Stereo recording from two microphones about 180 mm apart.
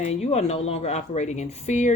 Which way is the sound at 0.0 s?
40° left (ahead or behind).